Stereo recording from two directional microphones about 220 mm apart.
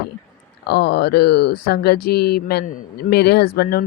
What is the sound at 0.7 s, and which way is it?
Speech, 45° left (ahead or behind).